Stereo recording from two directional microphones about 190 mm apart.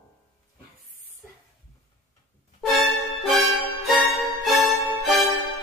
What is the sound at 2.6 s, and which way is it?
Music, centre (ahead or behind).